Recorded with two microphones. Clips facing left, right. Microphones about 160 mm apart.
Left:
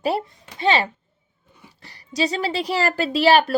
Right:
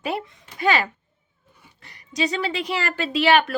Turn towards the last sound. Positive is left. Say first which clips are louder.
# left 2 dB
turn(degrees=35)  # may be behind; listen again after turning